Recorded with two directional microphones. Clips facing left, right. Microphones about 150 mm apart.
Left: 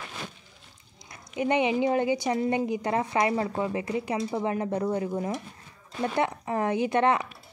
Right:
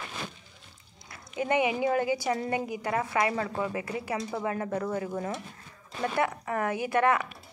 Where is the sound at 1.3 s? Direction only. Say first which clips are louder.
Left 2 dB; 20° left (ahead or behind).